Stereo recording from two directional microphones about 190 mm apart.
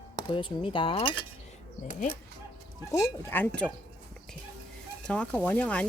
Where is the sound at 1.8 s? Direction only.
45° left (ahead or behind).